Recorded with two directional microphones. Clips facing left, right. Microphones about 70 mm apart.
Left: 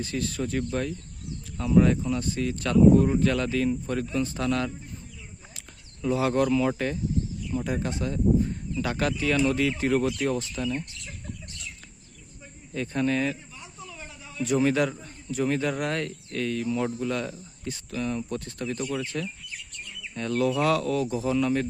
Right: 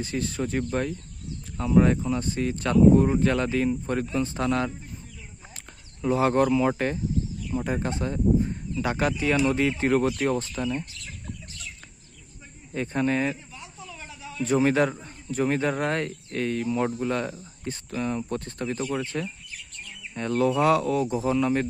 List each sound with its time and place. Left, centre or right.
0.0 s speech: right
5.5 s a sound: right
6.7 s a man's voice: right; by 9.6 s centre
9.6 s a man's voice: right
12.7 s speech: right
13.8 s a sound: centre
14.4 s a man's voice: right